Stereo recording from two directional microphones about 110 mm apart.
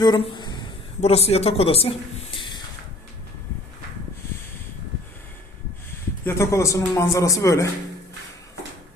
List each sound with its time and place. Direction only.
0.2 s a sound: 45° left (ahead or behind)
1.0 s speech: 70° left (ahead or behind); by 2.6 s 50° left (ahead or behind)
6.2 s a man's voice: 25° left (ahead or behind)